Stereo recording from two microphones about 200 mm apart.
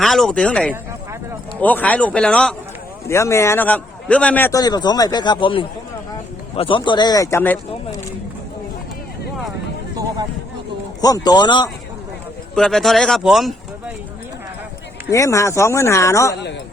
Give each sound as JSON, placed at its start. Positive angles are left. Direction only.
{"t": 0.0, "sound": "a man's voice", "side_deg": 0}
{"t": 3.1, "sound": "a man's voice", "side_deg": 15}
{"t": 11.0, "sound": "speech", "side_deg": 20}
{"t": 12.5, "sound": "speech", "side_deg": 0}
{"t": 15.1, "sound": "a man's voice", "side_deg": 15}